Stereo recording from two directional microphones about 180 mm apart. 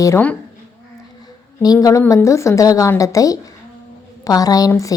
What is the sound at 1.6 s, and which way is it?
Speech, 20° left (ahead or behind).